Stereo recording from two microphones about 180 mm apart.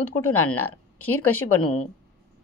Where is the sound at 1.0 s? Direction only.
10° left (ahead or behind).